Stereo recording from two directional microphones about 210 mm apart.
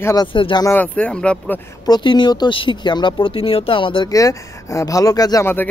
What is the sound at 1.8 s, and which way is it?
Speech, 20° left (ahead or behind).